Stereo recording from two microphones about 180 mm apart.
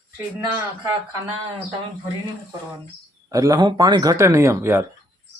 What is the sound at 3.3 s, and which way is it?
Speech, 20° right (ahead or behind).